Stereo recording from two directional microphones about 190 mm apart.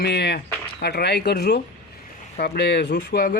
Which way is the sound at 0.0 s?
60° left (ahead or behind).